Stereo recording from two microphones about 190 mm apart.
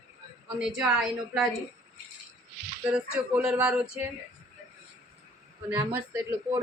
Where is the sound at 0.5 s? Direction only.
5° right (ahead or behind).